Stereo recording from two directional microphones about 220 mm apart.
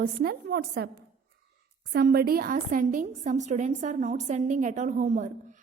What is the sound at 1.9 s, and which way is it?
A woman's voice, 45° right (ahead or behind).